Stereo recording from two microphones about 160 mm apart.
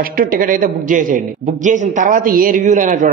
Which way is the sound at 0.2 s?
60° right (ahead or behind).